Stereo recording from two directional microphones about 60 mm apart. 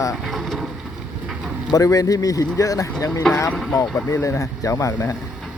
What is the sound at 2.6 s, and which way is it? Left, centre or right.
Speech, left.